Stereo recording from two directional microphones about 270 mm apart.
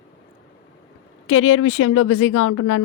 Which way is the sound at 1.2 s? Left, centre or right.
Left.